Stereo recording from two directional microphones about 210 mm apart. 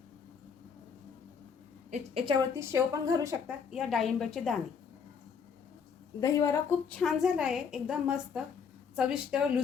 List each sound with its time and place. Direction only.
1.9 s a woman's voice: 25° right (ahead or behind)
2.6 s a woman's voice: 15° right (ahead or behind)
3.7 s a woman's voice: centre (ahead or behind)
6.1 s speech: 15° left (ahead or behind)
7.0 s a woman's voice: centre (ahead or behind)